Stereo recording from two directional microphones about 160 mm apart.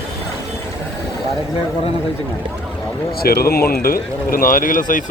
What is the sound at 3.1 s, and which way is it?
Speech, 70° left (ahead or behind).